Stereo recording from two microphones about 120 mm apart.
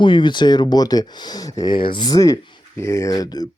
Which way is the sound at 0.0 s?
40° left (ahead or behind).